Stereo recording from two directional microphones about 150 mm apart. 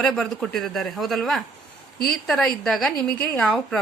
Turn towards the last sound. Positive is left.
turn(degrees=5)  # may be behind; listen again after turning